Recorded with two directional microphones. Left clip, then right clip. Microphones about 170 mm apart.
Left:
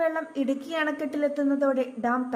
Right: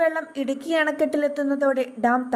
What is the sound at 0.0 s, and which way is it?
A woman's voice, 35° right (ahead or behind).